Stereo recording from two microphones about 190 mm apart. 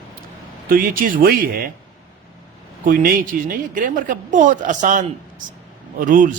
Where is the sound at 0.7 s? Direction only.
45° right (ahead or behind).